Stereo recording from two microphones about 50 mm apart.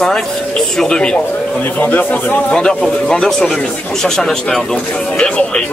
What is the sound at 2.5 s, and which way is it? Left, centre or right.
Speech, centre.